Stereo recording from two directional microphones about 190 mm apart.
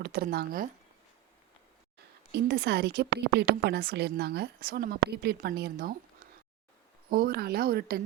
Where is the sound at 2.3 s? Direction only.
60° right (ahead or behind).